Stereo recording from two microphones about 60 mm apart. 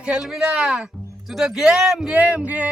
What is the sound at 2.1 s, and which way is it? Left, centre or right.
Speech, right.